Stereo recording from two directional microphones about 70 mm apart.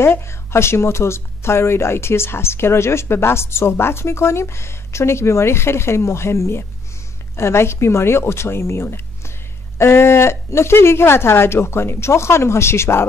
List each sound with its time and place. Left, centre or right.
0.0 s speech: left